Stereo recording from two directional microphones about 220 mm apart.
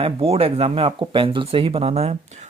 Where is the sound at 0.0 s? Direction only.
25° right (ahead or behind).